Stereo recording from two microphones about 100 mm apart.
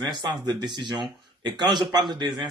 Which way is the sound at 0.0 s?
45° right (ahead or behind).